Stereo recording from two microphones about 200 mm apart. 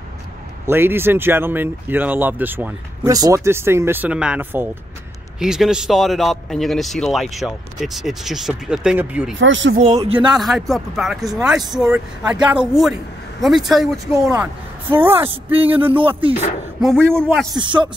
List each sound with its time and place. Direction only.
0.7 s a man's voice: 10° right (ahead or behind)
9.4 s speech: 65° right (ahead or behind)
9.8 s speech: 30° right (ahead or behind)
10.2 s a man's voice: centre (ahead or behind)
15.2 s speech: 30° right (ahead or behind)
16.8 s a man's voice: 5° left (ahead or behind)
17.6 s speech: 25° right (ahead or behind)